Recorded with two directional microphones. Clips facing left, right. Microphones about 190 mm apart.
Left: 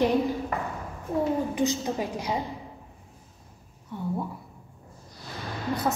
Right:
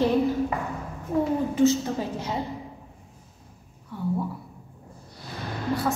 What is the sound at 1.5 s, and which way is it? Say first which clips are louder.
Speech: right 5 dB; 15° left (ahead or behind).